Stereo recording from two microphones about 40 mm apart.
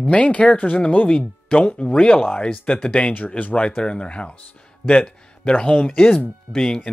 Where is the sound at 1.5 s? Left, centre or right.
Left.